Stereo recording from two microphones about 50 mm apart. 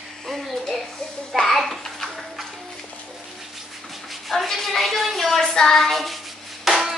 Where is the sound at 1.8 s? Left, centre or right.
Centre.